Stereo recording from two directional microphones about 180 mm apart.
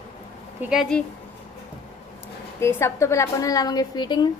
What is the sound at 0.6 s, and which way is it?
Speech, 5° right (ahead or behind).